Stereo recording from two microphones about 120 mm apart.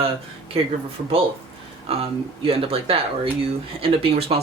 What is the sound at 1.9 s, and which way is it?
Speech, 55° right (ahead or behind).